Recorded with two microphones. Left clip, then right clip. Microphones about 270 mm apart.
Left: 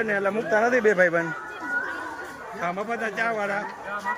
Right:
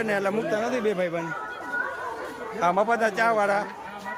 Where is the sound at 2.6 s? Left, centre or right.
Centre.